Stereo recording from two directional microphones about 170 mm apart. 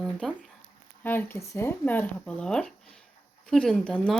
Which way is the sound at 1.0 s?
10° left (ahead or behind).